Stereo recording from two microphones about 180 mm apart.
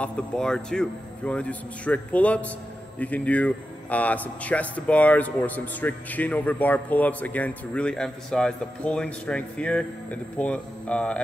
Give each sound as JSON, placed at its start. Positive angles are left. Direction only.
{"t": 0.0, "sound": "speech", "side_deg": 5}